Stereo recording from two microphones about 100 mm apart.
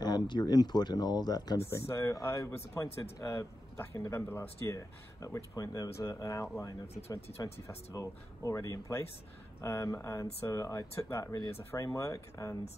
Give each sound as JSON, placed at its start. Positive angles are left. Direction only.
{"t": 0.0, "sound": "speech", "side_deg": 45}
{"t": 1.7, "sound": "speech", "side_deg": 30}
{"t": 7.2, "sound": "speech", "side_deg": 90}
{"t": 7.6, "sound": "speech", "side_deg": 35}